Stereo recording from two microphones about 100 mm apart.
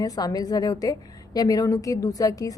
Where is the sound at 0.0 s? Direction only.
40° left (ahead or behind).